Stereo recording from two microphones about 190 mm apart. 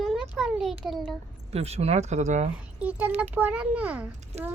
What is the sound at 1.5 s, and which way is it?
Speech, 35° right (ahead or behind).